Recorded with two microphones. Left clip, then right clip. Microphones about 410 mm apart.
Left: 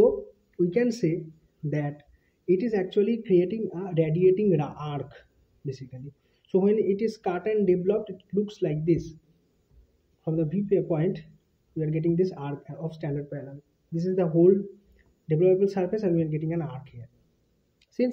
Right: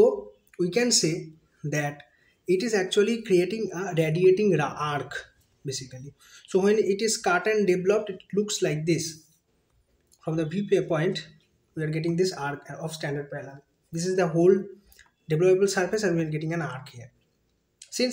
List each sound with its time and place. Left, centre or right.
0.6 s speech: left
6.6 s speech: left
10.2 s speech: left
17.7 s a sound: left